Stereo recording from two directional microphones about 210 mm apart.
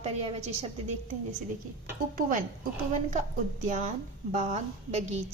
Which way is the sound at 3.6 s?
35° right (ahead or behind).